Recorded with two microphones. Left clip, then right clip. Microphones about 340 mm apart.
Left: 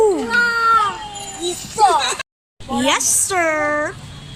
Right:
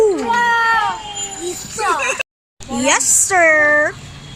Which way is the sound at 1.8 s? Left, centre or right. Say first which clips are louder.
Left 3 dB; left.